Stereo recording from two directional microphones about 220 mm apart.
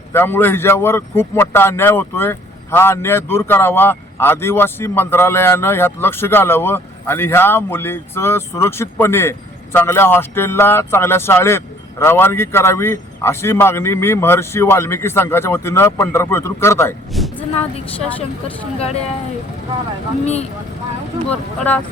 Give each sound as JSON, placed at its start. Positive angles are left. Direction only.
{"t": 0.1, "sound": "a man's voice", "side_deg": 10}
{"t": 17.1, "sound": "vehicle", "side_deg": 0}
{"t": 20.2, "sound": "speech", "side_deg": 30}
{"t": 21.2, "sound": "a man's voice", "side_deg": 5}